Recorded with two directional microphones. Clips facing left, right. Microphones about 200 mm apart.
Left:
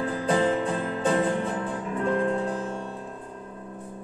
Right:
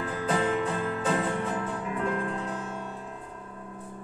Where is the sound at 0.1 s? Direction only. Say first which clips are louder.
Left 3 dB; 35° left (ahead or behind).